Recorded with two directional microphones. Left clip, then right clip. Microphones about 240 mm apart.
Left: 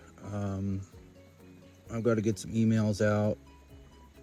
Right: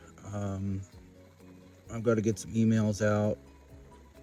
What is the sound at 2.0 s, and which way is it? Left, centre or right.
Speech, centre.